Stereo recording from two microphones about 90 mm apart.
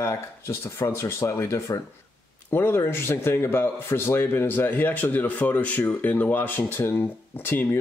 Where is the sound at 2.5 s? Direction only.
25° left (ahead or behind).